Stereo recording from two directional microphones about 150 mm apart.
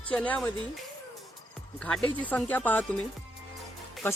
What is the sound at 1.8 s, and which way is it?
A man's voice, 5° left (ahead or behind).